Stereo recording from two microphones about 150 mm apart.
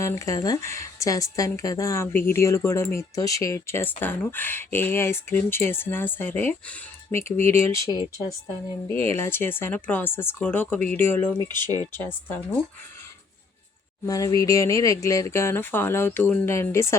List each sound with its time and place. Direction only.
0.0 s speech: 20° left (ahead or behind)
8.9 s speech: 15° left (ahead or behind)
14.0 s speech: 25° left (ahead or behind)